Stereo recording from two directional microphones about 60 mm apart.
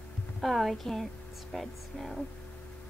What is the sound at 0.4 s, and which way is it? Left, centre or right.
Speech, centre.